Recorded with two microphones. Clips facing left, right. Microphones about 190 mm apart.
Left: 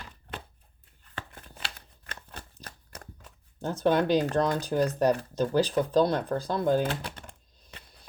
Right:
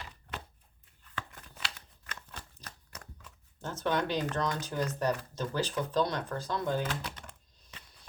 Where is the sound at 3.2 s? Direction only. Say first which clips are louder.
Left 8 dB; 35° left (ahead or behind).